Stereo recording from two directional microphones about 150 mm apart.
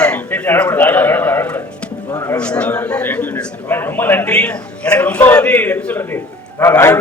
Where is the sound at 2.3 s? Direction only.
5° left (ahead or behind).